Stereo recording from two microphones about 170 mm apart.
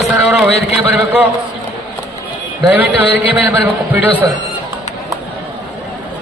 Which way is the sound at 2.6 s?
10° right (ahead or behind).